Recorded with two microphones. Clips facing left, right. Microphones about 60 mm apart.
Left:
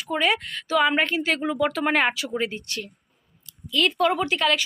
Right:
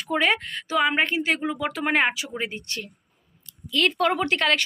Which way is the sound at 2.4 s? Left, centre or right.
Right.